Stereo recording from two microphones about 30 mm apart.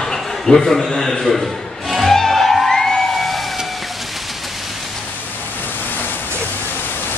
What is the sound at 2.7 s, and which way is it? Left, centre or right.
Music, left.